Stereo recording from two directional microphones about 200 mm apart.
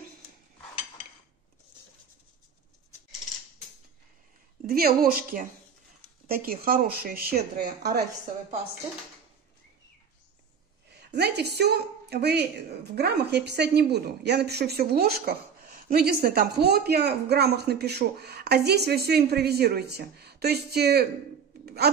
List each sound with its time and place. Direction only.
4.6 s a woman's voice: 50° right (ahead or behind)
10.9 s a woman's voice: 55° right (ahead or behind)